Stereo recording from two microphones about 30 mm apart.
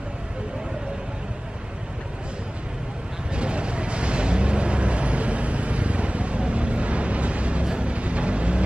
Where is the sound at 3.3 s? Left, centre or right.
Right.